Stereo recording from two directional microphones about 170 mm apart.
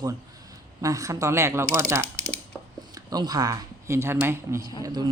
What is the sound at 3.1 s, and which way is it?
Speech, 20° right (ahead or behind).